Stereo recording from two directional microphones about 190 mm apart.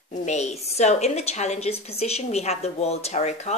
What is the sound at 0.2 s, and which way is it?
Speech, 35° left (ahead or behind).